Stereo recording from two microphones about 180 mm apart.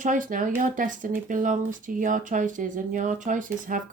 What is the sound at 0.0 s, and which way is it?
Speech, 45° right (ahead or behind).